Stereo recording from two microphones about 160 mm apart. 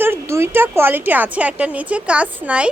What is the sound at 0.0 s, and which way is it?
Speech, 15° right (ahead or behind).